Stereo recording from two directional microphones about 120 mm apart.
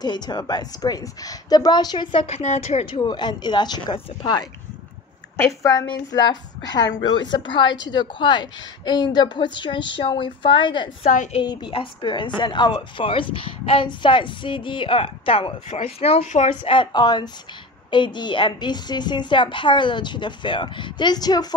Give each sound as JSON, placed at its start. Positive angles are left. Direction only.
{"t": 0.0, "sound": "a woman's voice", "side_deg": 35}
{"t": 2.2, "sound": "a woman's voice", "side_deg": 65}
{"t": 3.0, "sound": "a woman's voice", "side_deg": 35}
{"t": 16.6, "sound": "a woman's voice", "side_deg": 45}